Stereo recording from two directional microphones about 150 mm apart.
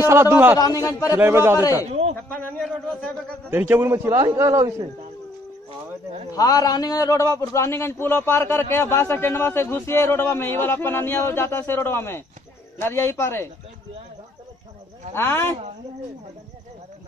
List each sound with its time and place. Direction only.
0.0 s a man's voice: 15° right (ahead or behind)
0.6 s a man's voice: 25° left (ahead or behind)
1.1 s a man's voice: 15° right (ahead or behind)
1.6 s a man's voice: 25° left (ahead or behind)
1.9 s a man's voice: 45° right (ahead or behind)
2.2 s a man's voice: 15° left (ahead or behind)
3.4 s a man's voice: 15° right (ahead or behind)
6.3 s a man's voice: 25° left (ahead or behind)
15.1 s a man's voice: 15° left (ahead or behind)